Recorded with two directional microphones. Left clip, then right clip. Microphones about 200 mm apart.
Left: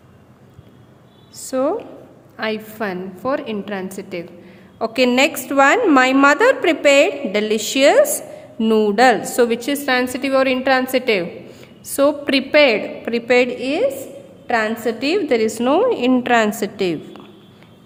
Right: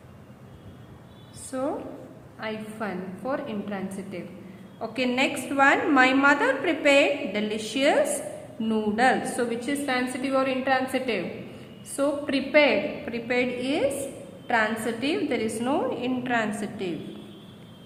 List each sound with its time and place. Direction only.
1.5 s a woman's voice: 50° left (ahead or behind)